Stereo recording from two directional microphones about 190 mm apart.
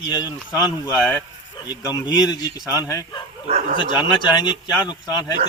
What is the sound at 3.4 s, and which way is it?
Speech, 35° right (ahead or behind).